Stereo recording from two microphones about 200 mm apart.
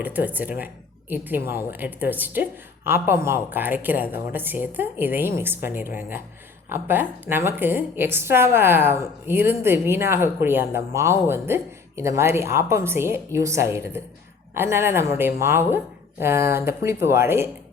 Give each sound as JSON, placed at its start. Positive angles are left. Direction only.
{"t": 0.0, "sound": "a woman's voice", "side_deg": -10}